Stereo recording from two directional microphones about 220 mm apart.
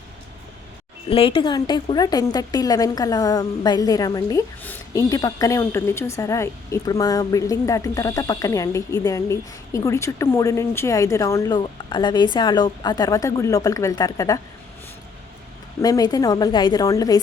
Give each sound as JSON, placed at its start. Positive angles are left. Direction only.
{"t": 1.1, "sound": "a woman's voice", "side_deg": 25}
{"t": 15.8, "sound": "a woman's voice", "side_deg": 15}